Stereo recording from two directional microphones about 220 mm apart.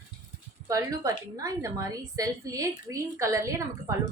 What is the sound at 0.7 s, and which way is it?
A woman's voice, 15° right (ahead or behind).